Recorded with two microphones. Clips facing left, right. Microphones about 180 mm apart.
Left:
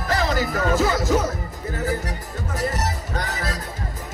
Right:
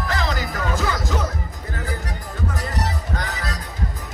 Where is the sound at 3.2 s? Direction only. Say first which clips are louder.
Left 1 dB; 40° left (ahead or behind).